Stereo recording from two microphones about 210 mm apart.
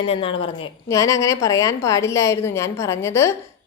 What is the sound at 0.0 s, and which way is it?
A woman's voice, 25° left (ahead or behind).